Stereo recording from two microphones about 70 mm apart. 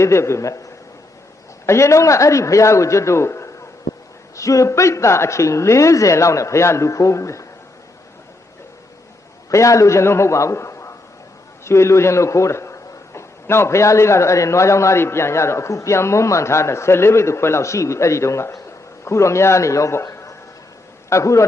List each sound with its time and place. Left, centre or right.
0.0 s a man's voice: left
9.5 s a man's voice: left